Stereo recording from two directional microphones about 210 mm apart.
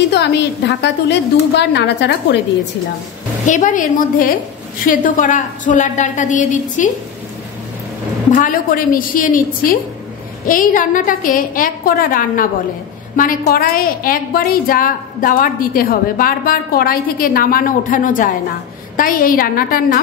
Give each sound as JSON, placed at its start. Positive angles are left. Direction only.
{"t": 0.1, "sound": "a woman's voice", "side_deg": 55}
{"t": 3.4, "sound": "a woman's voice", "side_deg": 35}
{"t": 8.3, "sound": "a woman's voice", "side_deg": 40}